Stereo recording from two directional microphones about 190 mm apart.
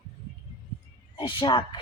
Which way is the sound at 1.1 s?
25° left (ahead or behind).